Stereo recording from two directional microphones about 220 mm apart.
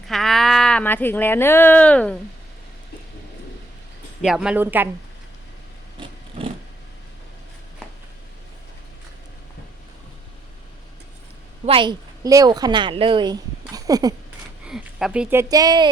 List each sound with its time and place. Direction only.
0.1 s speech: centre (ahead or behind)
4.2 s a woman's voice: centre (ahead or behind)
11.6 s a woman's voice: 25° right (ahead or behind)
14.6 s speech: centre (ahead or behind); by 15.9 s 20° right (ahead or behind)